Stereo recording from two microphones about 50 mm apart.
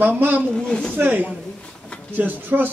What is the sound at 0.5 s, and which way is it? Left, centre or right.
Speech, centre.